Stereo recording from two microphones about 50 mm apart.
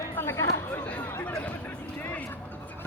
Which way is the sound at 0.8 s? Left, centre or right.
Left.